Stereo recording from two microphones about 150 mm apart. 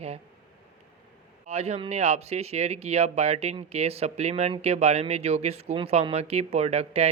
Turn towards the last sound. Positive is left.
turn(degrees=-45)  # may be behind; listen again after turning